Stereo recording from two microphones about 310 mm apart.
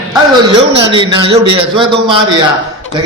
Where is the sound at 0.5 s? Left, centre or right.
Centre.